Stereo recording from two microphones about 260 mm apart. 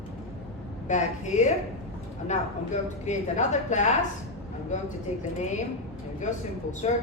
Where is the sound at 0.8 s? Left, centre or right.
Left.